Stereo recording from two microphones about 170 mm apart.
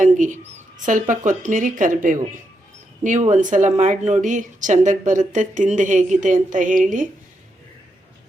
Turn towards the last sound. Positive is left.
turn(degrees=-50)  # may be behind; listen again after turning